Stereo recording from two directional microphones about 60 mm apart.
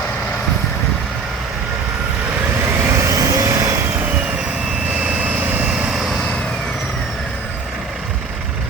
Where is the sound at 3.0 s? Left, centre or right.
Right.